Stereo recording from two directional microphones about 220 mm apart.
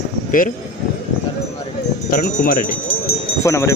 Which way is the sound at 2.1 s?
35° left (ahead or behind).